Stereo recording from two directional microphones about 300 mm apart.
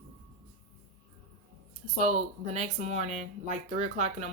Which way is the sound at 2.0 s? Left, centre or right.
Right.